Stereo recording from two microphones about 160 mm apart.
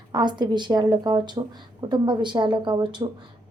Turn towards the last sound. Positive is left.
turn(degrees=-30)  # may be behind; listen again after turning